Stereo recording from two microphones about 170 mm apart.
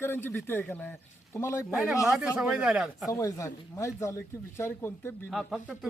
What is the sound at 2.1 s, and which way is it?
Speech, 5° right (ahead or behind).